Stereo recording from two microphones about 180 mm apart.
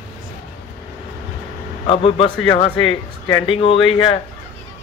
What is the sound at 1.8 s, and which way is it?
A man's voice, 30° left (ahead or behind).